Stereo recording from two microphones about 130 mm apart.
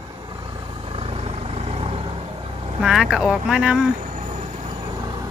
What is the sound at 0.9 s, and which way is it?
Vehicle, 50° right (ahead or behind).